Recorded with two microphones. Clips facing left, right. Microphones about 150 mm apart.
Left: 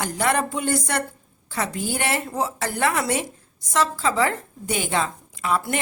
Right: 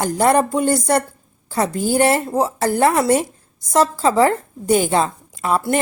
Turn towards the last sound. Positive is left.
turn(degrees=-40)  # may be behind; listen again after turning